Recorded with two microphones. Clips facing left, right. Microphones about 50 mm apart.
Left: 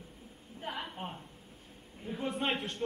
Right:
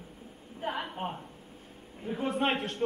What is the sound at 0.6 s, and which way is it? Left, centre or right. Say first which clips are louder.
A woman's voice: right 6 dB; right.